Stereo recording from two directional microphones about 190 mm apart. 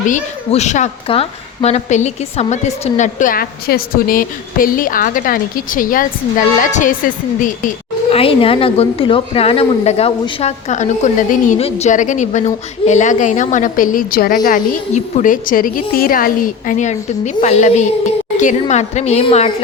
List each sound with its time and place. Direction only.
0.0 s a woman's voice: 40° left (ahead or behind)
8.1 s speech: 30° left (ahead or behind)